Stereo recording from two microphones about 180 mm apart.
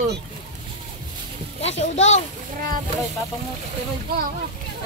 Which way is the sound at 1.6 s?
35° left (ahead or behind).